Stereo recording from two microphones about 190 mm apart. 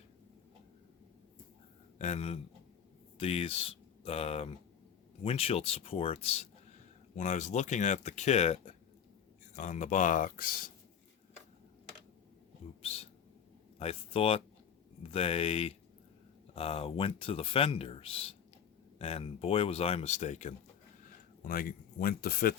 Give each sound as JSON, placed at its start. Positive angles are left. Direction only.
{"t": 2.0, "sound": "a man's voice", "side_deg": 35}
{"t": 13.7, "sound": "speech", "side_deg": 30}
{"t": 21.4, "sound": "speech", "side_deg": 50}